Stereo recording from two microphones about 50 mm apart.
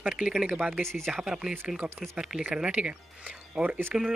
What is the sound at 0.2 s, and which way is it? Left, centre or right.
Speech, centre.